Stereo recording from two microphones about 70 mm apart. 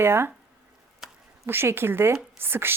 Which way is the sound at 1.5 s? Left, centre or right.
Right.